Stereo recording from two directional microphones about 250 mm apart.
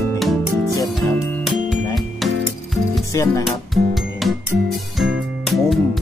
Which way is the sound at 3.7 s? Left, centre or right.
Centre.